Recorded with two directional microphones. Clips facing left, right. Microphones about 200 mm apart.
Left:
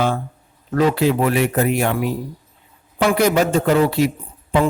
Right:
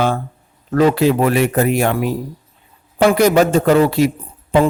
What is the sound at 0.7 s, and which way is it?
Speech, 45° right (ahead or behind).